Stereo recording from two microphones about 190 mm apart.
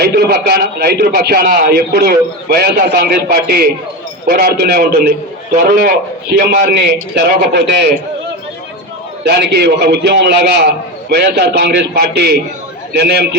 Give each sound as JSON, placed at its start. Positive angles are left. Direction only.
{"t": 0.0, "sound": "a man's voice", "side_deg": -55}
{"t": 9.2, "sound": "a man's voice", "side_deg": -60}